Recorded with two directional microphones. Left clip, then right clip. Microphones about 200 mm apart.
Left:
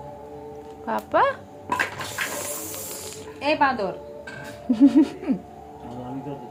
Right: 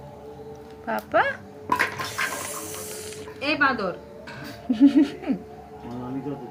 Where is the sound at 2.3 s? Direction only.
20° left (ahead or behind).